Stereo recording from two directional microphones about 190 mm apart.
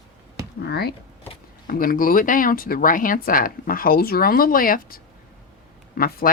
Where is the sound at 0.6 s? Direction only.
55° left (ahead or behind).